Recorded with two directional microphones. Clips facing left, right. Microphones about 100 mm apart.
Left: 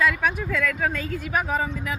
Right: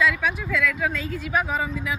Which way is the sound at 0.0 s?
50° left (ahead or behind).